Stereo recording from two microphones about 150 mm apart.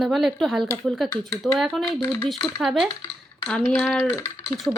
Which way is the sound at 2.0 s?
15° left (ahead or behind).